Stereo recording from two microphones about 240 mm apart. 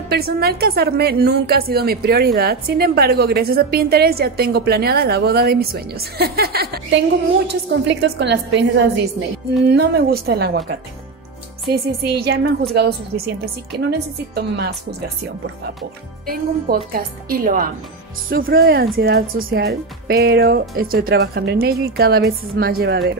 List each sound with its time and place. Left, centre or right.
0.1 s a woman's voice: right
11.7 s a woman's voice: right
16.3 s a woman's voice: right